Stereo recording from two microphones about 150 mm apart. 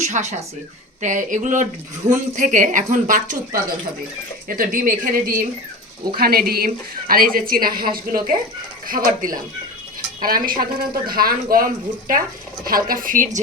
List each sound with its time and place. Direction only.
0.0 s a woman's voice: 50° right (ahead or behind); by 5.5 s 70° right (ahead or behind)
6.1 s a woman's voice: 80° right; by 13.4 s 60° right (ahead or behind)